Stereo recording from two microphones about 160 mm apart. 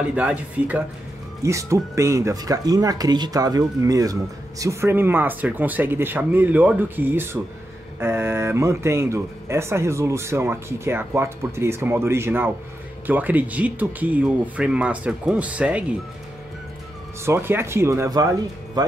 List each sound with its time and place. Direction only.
0.1 s speech: 10° right (ahead or behind)
1.4 s speech: 20° right (ahead or behind)
17.2 s speech: 15° right (ahead or behind)